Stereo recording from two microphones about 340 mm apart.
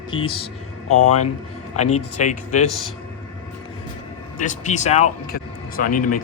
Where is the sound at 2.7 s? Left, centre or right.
Left.